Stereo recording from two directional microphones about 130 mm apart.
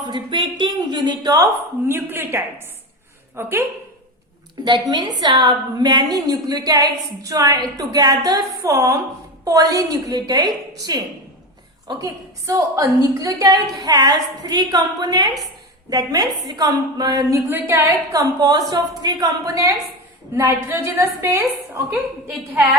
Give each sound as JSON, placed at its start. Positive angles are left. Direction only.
{"t": 0.0, "sound": "a woman's voice", "side_deg": -35}
{"t": 1.9, "sound": "a woman's voice", "side_deg": -15}
{"t": 4.6, "sound": "a woman's voice", "side_deg": -35}